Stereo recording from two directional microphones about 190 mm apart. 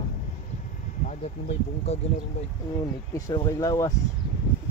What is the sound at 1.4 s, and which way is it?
Speech, 35° left (ahead or behind).